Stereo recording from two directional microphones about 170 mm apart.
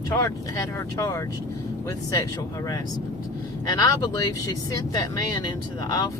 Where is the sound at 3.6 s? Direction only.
20° left (ahead or behind).